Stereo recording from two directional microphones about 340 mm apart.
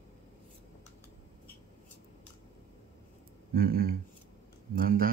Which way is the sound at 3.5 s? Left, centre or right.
Right.